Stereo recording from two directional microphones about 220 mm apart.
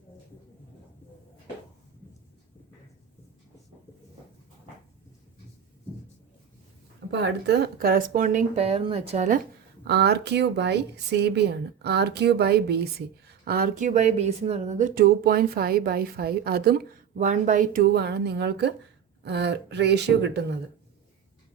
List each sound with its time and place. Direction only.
7.1 s speech: 50° right (ahead or behind); by 9.4 s 30° right (ahead or behind)
9.8 s speech: 50° right (ahead or behind)